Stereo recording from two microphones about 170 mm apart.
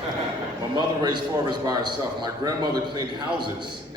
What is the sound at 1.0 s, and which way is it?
A man's voice, 25° right (ahead or behind).